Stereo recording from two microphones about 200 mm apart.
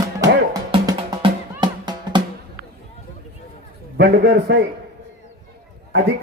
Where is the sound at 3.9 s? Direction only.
55° right (ahead or behind).